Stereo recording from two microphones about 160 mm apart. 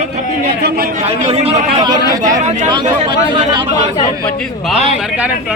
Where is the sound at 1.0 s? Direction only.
40° right (ahead or behind).